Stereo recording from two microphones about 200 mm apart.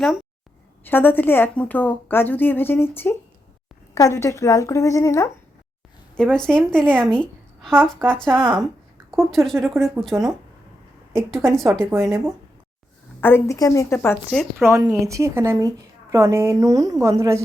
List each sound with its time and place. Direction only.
0.0 s a woman's voice: centre (ahead or behind)
0.9 s a woman's voice: 10° left (ahead or behind)
6.3 s speech: 5° left (ahead or behind)
7.2 s a sound: 5° left (ahead or behind)
7.9 s a woman's voice: 5° left (ahead or behind)
13.2 s a woman's voice: 15° left (ahead or behind)
14.6 s a woman's voice: 15° right (ahead or behind)